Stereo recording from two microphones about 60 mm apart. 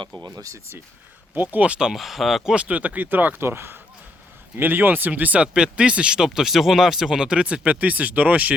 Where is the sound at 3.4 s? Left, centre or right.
Right.